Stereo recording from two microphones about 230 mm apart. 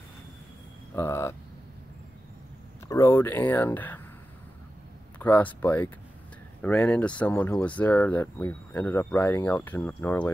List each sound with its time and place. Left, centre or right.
0.9 s speech: centre
2.9 s speech: centre
5.2 s speech: centre